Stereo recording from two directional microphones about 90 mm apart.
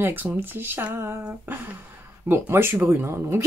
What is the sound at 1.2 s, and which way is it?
Speech, 20° right (ahead or behind).